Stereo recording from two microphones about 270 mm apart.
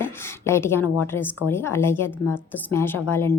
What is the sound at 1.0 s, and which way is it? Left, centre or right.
A woman's voice, centre.